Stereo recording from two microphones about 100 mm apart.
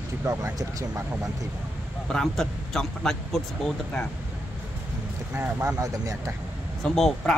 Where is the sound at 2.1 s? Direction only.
5° left (ahead or behind).